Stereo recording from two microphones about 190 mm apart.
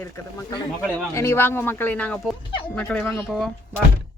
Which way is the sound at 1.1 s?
15° left (ahead or behind).